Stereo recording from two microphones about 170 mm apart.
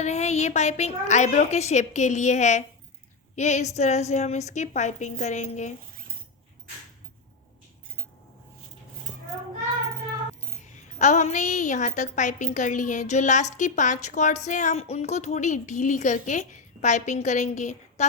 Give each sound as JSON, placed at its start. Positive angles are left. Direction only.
{"t": 0.0, "sound": "a woman's voice", "side_deg": 40}
{"t": 10.6, "sound": "a woman's voice", "side_deg": 45}